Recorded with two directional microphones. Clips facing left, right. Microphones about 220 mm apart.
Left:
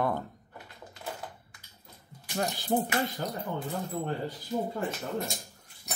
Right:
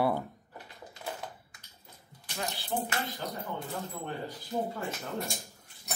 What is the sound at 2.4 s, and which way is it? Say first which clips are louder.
Speech: left 7 dB; 45° left (ahead or behind).